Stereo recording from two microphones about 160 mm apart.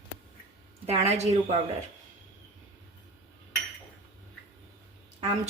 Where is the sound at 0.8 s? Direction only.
40° right (ahead or behind).